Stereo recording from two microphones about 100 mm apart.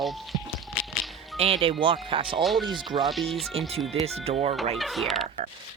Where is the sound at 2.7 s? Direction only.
50° right (ahead or behind).